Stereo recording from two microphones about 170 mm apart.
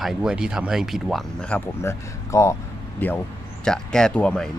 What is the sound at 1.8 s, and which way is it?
Speech, 15° left (ahead or behind).